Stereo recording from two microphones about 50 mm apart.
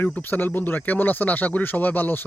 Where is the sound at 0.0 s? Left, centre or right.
Left.